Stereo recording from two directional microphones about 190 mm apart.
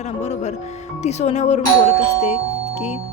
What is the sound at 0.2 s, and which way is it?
Speech, 35° left (ahead or behind).